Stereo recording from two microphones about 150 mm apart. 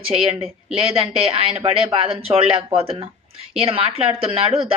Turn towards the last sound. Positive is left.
turn(degrees=-40)  # may be behind; listen again after turning